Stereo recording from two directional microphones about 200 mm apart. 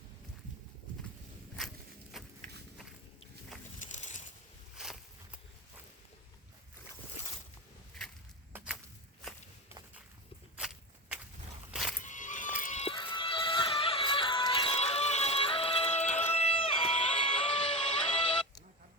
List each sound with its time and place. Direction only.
2.1 s walk: centre (ahead or behind)
3.8 s a sound: 35° left (ahead or behind)
8.5 s walk: 5° right (ahead or behind)
11.7 s music: centre (ahead or behind)
12.0 s music: 40° left (ahead or behind)